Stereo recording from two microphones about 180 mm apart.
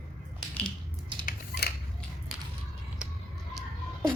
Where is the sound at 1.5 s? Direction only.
60° left (ahead or behind).